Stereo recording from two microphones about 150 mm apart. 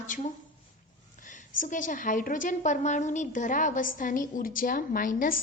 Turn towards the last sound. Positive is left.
turn(degrees=65)  # may be behind; listen again after turning